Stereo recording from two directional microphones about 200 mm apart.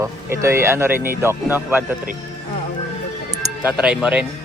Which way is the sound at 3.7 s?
5° right (ahead or behind).